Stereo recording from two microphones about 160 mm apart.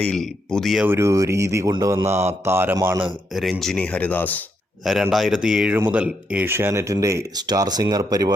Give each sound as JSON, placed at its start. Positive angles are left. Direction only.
{"t": 0.0, "sound": "speech", "side_deg": 5}
{"t": 0.9, "sound": "speech", "side_deg": -15}
{"t": 3.3, "sound": "speech", "side_deg": 0}
{"t": 4.9, "sound": "speech", "side_deg": 0}